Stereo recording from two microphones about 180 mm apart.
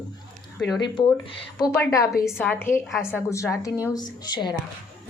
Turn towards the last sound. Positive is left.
turn(degrees=25)  # may be behind; listen again after turning